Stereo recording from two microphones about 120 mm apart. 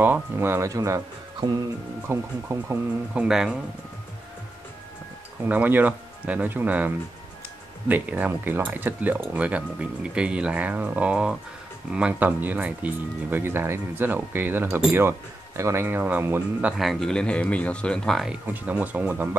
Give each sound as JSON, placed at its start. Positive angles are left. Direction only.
{"t": 0.0, "sound": "speech", "side_deg": -15}
{"t": 3.3, "sound": "speech", "side_deg": -5}
{"t": 5.4, "sound": "speech", "side_deg": -15}
{"t": 7.9, "sound": "speech", "side_deg": -15}
{"t": 16.7, "sound": "speech", "side_deg": 0}
{"t": 18.3, "sound": "speech", "side_deg": -15}